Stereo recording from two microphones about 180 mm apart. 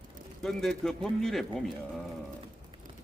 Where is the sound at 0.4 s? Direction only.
5° left (ahead or behind).